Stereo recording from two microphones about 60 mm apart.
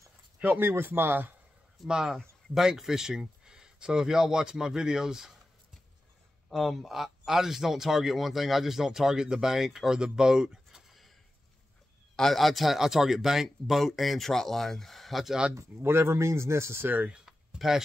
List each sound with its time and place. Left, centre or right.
0.6 s speech: right
1.9 s speech: centre
6.5 s speech: centre
12.2 s speech: centre
15.5 s speech: right
17.6 s speech: centre